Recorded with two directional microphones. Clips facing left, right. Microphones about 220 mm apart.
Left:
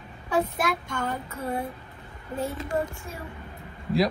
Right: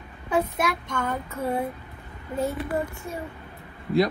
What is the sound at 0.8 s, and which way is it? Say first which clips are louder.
Speech: right 2 dB; 5° left (ahead or behind).